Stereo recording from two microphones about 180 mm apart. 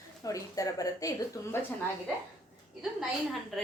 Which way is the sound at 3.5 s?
Centre (ahead or behind).